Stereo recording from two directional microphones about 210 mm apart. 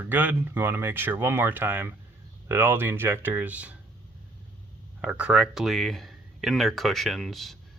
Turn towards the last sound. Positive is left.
turn(degrees=0)  # may be behind; listen again after turning